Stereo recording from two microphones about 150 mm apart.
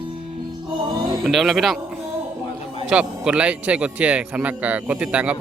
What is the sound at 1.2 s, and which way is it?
Speech, centre (ahead or behind).